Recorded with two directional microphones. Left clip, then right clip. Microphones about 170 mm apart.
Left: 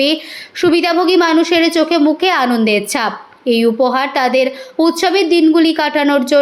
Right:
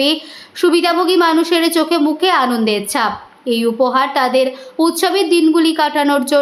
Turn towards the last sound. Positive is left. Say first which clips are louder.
# left 1 dB
turn(degrees=10)  # may be behind; listen again after turning